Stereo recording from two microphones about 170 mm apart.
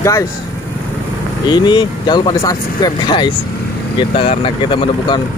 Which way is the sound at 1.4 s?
25° left (ahead or behind).